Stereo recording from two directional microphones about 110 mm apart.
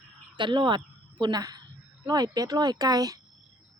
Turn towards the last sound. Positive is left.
turn(degrees=-35)  # may be behind; listen again after turning